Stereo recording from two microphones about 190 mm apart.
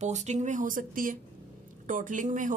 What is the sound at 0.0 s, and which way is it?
A woman's voice, 40° right (ahead or behind).